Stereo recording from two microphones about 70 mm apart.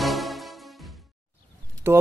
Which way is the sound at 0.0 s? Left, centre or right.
Centre.